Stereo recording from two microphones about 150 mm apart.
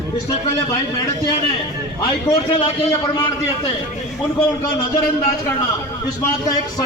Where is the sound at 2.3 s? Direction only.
25° left (ahead or behind).